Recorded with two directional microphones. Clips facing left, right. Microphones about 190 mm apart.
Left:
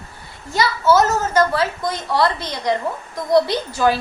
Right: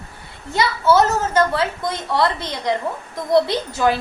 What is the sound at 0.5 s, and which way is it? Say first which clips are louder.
A woman's voice: even; 25° right (ahead or behind).